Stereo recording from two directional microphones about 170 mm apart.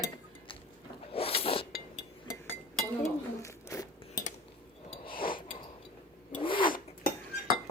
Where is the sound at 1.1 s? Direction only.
35° left (ahead or behind).